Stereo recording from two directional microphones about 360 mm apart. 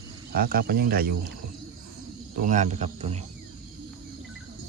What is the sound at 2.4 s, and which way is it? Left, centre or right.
Speech, centre.